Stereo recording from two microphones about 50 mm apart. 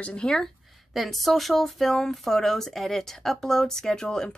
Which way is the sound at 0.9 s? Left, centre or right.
Centre.